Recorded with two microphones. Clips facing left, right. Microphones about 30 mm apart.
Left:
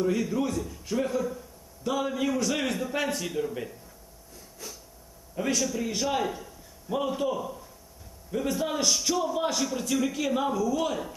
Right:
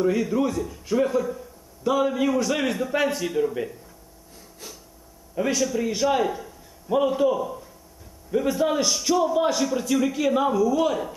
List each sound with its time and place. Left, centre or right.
0.0 s a man's voice: centre
5.3 s a man's voice: centre